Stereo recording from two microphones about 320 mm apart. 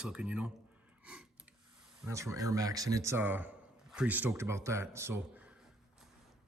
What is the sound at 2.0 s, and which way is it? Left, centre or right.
Speech, centre.